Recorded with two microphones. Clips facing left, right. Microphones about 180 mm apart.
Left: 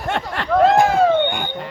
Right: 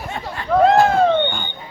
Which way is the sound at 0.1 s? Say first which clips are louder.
Left 8 dB; 80° left.